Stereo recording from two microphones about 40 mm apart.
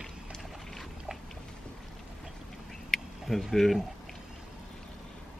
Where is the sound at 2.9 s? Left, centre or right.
Centre.